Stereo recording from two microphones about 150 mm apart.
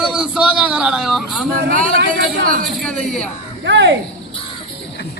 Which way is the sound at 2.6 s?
5° left (ahead or behind).